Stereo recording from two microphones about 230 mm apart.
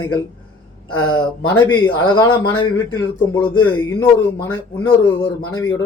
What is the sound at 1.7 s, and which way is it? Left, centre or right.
Speech, centre.